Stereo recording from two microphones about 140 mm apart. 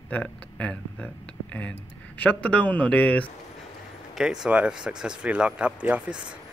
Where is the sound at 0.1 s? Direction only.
10° left (ahead or behind).